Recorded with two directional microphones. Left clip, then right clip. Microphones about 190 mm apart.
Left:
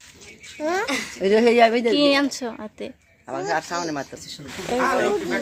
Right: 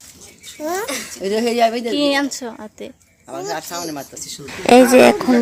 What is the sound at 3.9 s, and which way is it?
Speech, 30° left (ahead or behind).